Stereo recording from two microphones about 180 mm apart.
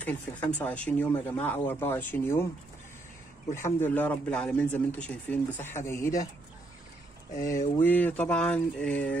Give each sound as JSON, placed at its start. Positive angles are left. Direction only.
{"t": 0.0, "sound": "speech", "side_deg": 10}
{"t": 3.5, "sound": "speech", "side_deg": 15}
{"t": 7.3, "sound": "a sound", "side_deg": 50}
{"t": 7.8, "sound": "speech", "side_deg": 10}